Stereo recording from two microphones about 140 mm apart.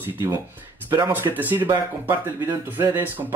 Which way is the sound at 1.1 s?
15° right (ahead or behind).